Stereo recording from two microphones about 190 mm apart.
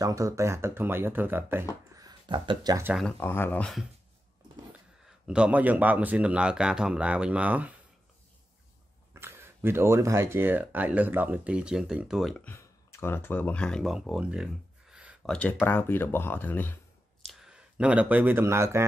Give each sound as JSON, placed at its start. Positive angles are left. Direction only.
{"t": 0.0, "sound": "speech", "side_deg": -15}
{"t": 2.0, "sound": "a sound", "side_deg": -20}
{"t": 2.9, "sound": "speech", "side_deg": 5}
{"t": 4.7, "sound": "speech", "side_deg": -5}
{"t": 9.1, "sound": "speech", "side_deg": -10}
{"t": 15.3, "sound": "speech", "side_deg": 10}
{"t": 17.2, "sound": "speech", "side_deg": 0}